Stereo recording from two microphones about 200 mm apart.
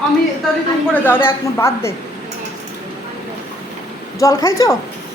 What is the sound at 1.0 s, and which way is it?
Speech, 10° left (ahead or behind).